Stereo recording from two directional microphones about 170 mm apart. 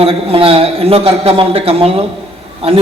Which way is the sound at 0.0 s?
35° right (ahead or behind).